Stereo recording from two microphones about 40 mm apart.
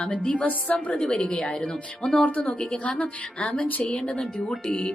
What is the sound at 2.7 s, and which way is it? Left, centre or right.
Speech, left.